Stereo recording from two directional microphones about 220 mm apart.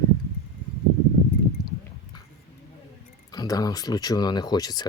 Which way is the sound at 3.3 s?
15° left (ahead or behind).